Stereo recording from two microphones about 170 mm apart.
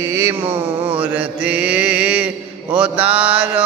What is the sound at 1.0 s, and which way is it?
Mantra, 10° right (ahead or behind).